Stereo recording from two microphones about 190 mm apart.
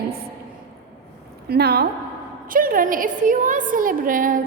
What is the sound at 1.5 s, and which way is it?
A woman's voice, 55° right (ahead or behind).